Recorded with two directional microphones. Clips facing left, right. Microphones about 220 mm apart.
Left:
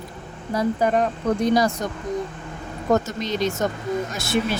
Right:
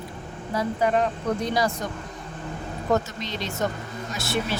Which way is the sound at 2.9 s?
45° left (ahead or behind).